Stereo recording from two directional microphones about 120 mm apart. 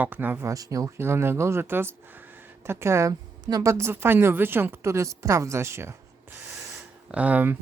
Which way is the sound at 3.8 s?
20° right (ahead or behind).